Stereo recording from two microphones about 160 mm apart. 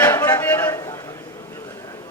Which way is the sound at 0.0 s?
20° left (ahead or behind).